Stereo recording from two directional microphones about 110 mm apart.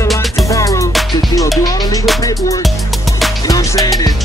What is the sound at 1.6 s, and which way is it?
Music, 40° left (ahead or behind).